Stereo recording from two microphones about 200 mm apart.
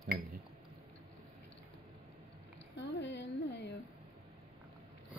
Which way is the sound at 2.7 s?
60° left (ahead or behind).